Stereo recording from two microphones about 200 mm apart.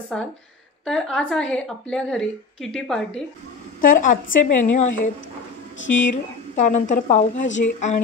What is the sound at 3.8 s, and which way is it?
A woman's voice, 40° left (ahead or behind).